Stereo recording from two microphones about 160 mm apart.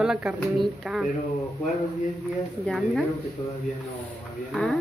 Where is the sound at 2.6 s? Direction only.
Centre (ahead or behind).